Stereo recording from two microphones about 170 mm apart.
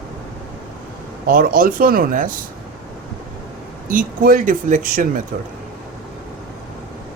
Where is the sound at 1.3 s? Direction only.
55° right (ahead or behind).